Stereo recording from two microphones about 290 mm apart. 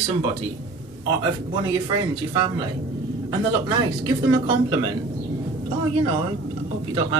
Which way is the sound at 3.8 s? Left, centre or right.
Centre.